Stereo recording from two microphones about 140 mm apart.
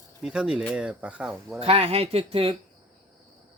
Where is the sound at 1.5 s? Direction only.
45° right (ahead or behind).